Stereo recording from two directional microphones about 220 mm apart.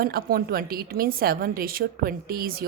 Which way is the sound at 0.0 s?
40° right (ahead or behind).